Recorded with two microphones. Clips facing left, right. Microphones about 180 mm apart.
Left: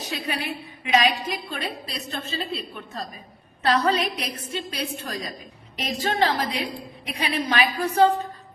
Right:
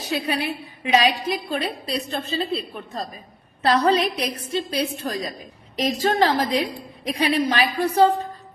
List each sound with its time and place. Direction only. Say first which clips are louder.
0.1 s a woman's voice: right 6 dB; 35° right (ahead or behind)